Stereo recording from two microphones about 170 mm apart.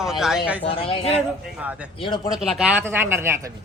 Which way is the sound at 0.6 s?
35° left (ahead or behind).